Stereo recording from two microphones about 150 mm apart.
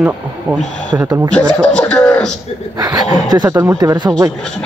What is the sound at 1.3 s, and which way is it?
Chuckle, 5° left (ahead or behind).